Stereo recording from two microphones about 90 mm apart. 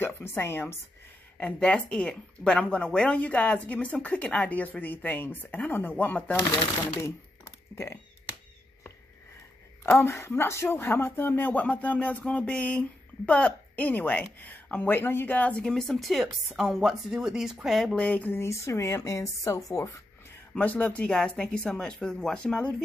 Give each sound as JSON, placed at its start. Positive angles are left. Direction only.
{"t": 0.0, "sound": "speech", "side_deg": 25}
{"t": 1.4, "sound": "speech", "side_deg": 10}
{"t": 7.7, "sound": "speech", "side_deg": 35}
{"t": 9.8, "sound": "speech", "side_deg": 30}
{"t": 17.9, "sound": "speech", "side_deg": 15}
{"t": 18.4, "sound": "speech", "side_deg": 30}
{"t": 20.5, "sound": "speech", "side_deg": 15}